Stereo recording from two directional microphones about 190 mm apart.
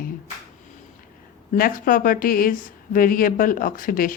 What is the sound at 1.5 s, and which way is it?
Speech, 45° left (ahead or behind).